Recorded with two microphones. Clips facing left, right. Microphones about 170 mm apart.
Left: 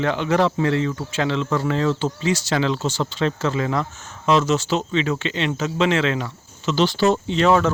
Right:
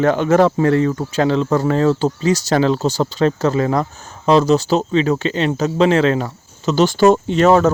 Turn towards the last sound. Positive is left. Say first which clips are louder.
# right 5 dB
turn(degrees=-40)  # may be behind; listen again after turning